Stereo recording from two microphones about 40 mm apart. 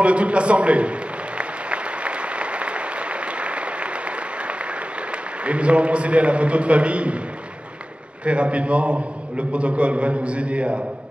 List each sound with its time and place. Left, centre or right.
0.0 s a man's voice: right
1.4 s applause: right
5.4 s a man's voice: right
8.3 s a man's voice: right